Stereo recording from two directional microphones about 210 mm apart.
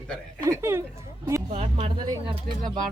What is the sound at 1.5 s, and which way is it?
Speech, 30° right (ahead or behind).